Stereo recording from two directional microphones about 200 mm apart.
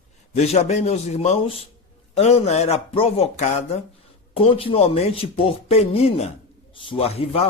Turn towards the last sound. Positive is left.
turn(degrees=30)  # may be behind; listen again after turning